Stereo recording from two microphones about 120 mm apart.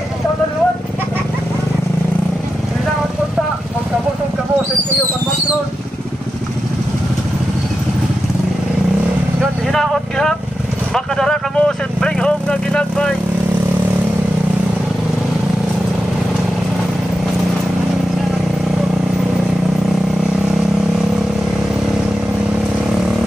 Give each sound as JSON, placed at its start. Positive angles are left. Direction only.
{"t": 9.7, "sound": "vehicle", "side_deg": 5}